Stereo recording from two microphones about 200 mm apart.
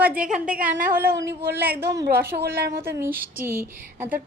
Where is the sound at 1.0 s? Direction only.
55° right (ahead or behind).